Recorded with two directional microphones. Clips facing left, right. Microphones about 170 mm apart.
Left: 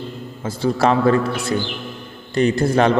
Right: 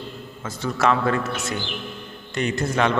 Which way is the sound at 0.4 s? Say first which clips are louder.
Left 4 dB; 30° left (ahead or behind).